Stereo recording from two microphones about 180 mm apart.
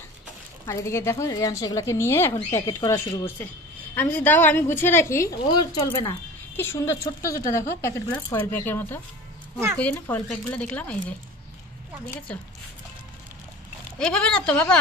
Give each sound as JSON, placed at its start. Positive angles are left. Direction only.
{"t": 0.7, "sound": "speech", "side_deg": 15}
{"t": 6.0, "sound": "speech", "side_deg": 15}
{"t": 13.9, "sound": "speech", "side_deg": 5}